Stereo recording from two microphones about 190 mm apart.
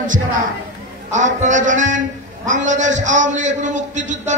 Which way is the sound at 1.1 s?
40° right (ahead or behind).